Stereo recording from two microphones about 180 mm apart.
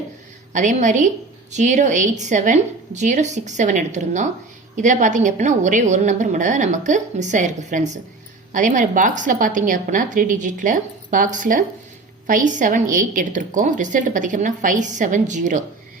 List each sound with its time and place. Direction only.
0.5 s a woman's voice: 45° right (ahead or behind)